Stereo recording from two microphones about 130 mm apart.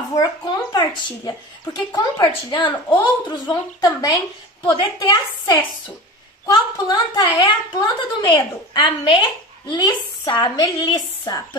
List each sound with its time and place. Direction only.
0.2 s a woman's voice: 25° left (ahead or behind)